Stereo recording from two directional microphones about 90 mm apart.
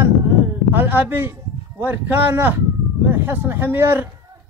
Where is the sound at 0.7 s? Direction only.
20° right (ahead or behind).